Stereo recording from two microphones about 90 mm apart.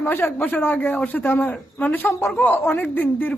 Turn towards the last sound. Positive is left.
turn(degrees=20)  # may be behind; listen again after turning